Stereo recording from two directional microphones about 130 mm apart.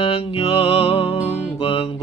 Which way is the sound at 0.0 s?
50° left (ahead or behind).